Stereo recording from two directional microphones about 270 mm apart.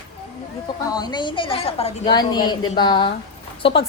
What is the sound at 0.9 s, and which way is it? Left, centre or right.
A woman's voice, centre.